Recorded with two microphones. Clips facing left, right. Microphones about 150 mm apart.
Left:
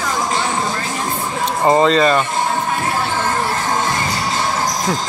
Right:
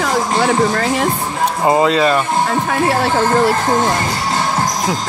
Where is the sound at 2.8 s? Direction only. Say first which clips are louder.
Right 5 dB; 90° right.